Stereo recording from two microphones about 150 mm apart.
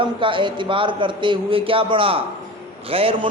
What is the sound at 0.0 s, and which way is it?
A man's voice, 35° right (ahead or behind).